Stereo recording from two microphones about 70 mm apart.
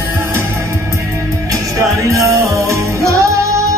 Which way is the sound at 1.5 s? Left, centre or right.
Right.